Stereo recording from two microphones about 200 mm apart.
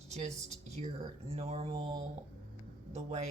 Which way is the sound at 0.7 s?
30° right (ahead or behind).